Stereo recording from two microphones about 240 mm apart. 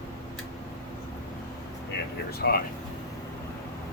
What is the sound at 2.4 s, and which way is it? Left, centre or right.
Speech, left.